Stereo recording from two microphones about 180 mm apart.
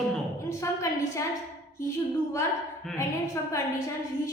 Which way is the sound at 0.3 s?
15° left (ahead or behind).